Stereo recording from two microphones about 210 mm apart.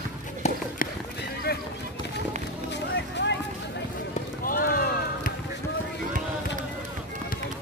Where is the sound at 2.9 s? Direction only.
55° left (ahead or behind).